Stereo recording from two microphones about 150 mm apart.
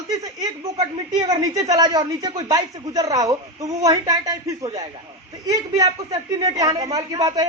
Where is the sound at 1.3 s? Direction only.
25° right (ahead or behind).